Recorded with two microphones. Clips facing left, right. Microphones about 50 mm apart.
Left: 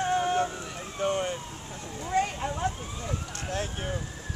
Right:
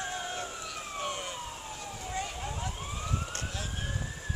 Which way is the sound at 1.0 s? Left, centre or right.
Left.